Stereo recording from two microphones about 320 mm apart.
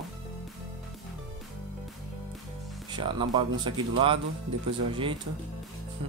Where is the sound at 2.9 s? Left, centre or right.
Centre.